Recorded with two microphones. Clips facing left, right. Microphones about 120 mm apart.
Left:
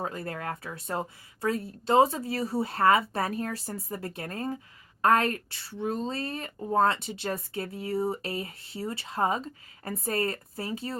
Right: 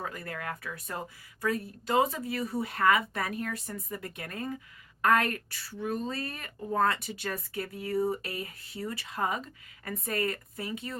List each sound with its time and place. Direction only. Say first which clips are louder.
0.0 s speech: left 4 dB; 30° left (ahead or behind)